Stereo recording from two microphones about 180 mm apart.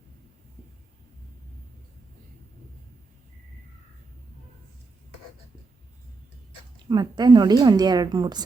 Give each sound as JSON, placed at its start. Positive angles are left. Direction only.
{"t": 6.7, "sound": "a woman's voice", "side_deg": -25}